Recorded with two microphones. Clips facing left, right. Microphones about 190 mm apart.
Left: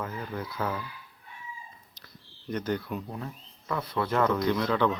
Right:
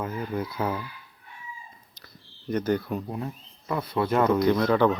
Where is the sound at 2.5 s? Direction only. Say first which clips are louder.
Right 5 dB; 50° right (ahead or behind).